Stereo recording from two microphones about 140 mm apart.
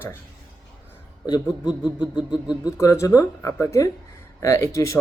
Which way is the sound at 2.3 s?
30° left (ahead or behind).